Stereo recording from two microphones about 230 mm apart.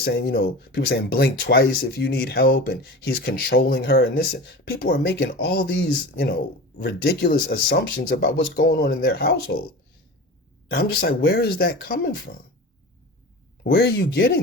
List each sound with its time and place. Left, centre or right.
0.0 s speech: left
10.7 s speech: left
13.7 s speech: left